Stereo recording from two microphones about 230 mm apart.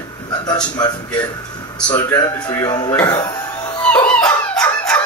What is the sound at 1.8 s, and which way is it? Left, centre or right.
A man's voice, centre.